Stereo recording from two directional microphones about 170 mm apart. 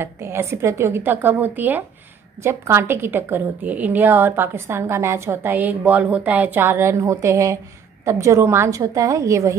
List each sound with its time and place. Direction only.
0.0 s a woman's voice: 15° right (ahead or behind)